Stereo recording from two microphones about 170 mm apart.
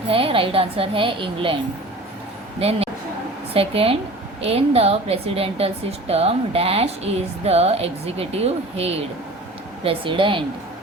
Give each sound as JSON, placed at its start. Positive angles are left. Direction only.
{"t": 0.1, "sound": "a woman's voice", "side_deg": -30}
{"t": 2.6, "sound": "a woman's voice", "side_deg": -35}